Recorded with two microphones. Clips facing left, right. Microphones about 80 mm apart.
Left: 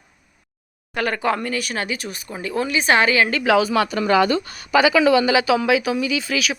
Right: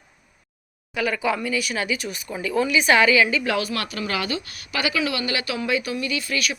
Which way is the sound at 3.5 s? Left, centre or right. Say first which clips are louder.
Left 8 dB; left.